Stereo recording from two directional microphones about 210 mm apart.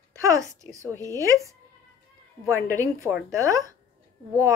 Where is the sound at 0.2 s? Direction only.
15° right (ahead or behind).